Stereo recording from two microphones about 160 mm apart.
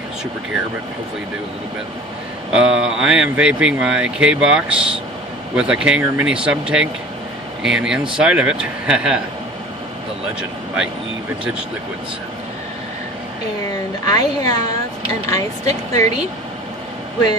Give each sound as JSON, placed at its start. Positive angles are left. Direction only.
{"t": 2.5, "sound": "speech", "side_deg": -5}
{"t": 14.0, "sound": "speech", "side_deg": 20}